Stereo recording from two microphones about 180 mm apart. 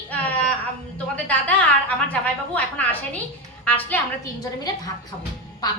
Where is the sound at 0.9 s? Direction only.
10° left (ahead or behind).